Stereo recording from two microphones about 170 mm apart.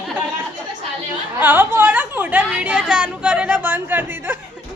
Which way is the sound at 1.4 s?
10° right (ahead or behind).